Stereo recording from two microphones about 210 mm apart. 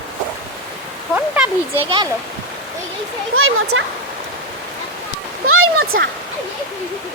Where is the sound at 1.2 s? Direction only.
5° right (ahead or behind).